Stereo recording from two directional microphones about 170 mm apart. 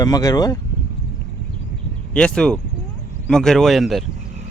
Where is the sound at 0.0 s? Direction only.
20° left (ahead or behind).